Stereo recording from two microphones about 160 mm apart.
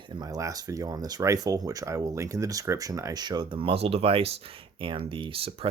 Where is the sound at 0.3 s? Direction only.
20° right (ahead or behind); by 4.3 s 35° right (ahead or behind).